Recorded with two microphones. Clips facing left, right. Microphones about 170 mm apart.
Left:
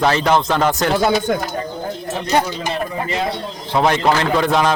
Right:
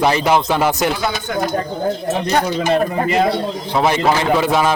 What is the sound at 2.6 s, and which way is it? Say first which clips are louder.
Speech: right 6 dB; 55° right (ahead or behind).